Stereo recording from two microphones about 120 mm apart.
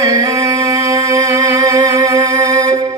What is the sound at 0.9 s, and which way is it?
Music, 30° right (ahead or behind).